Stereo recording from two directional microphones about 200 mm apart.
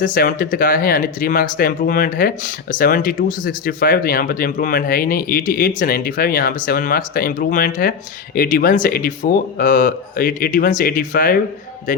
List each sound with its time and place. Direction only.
0.0 s speech: 45° left (ahead or behind)